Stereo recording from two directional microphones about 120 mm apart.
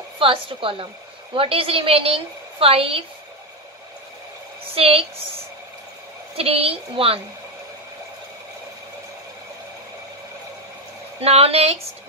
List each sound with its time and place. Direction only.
0.2 s a woman's voice: 45° right (ahead or behind)
4.7 s a woman's voice: 55° right (ahead or behind)
6.3 s a woman's voice: 55° right (ahead or behind)
11.1 s a woman's voice: 55° right (ahead or behind)